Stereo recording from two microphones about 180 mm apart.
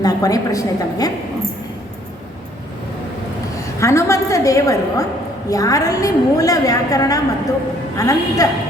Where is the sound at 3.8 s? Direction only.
15° left (ahead or behind).